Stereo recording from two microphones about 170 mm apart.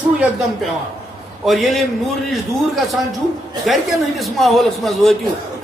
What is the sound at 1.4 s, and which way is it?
A man's voice, centre (ahead or behind).